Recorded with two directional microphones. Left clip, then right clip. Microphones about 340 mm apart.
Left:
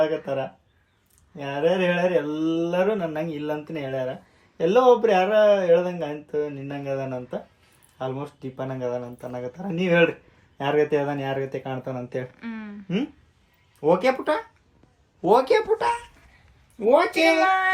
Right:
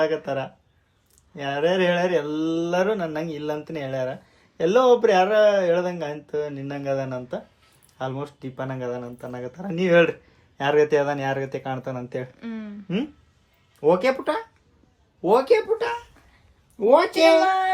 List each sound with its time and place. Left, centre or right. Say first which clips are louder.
0.0 s speech: even; centre
16.8 s a woman's voice: right 2 dB; centre
17.2 s speech: right 2 dB; centre